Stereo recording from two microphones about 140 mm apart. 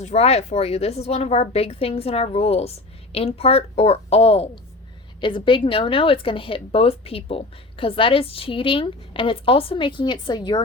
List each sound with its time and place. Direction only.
0.0 s a woman's voice: 50° left (ahead or behind); by 10.6 s 30° left (ahead or behind)